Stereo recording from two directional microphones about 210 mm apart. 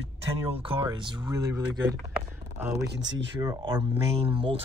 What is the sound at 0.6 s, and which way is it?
Speech, 25° right (ahead or behind).